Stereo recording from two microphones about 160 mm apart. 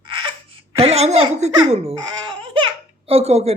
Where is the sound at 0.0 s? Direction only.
30° right (ahead or behind).